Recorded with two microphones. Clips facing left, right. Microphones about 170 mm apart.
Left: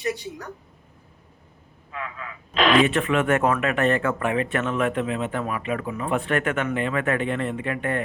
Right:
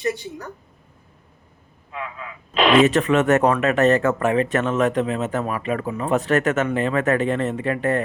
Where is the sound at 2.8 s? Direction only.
40° right (ahead or behind).